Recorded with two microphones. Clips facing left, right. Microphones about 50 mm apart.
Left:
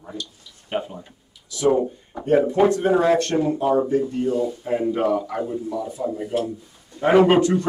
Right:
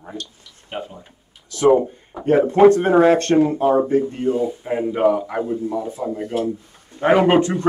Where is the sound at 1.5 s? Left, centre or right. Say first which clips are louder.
Right 4 dB; right.